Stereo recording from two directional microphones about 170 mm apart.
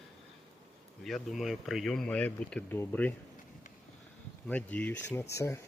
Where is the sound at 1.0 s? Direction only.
Centre (ahead or behind).